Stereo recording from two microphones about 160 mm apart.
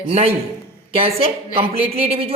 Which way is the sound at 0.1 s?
40° right (ahead or behind).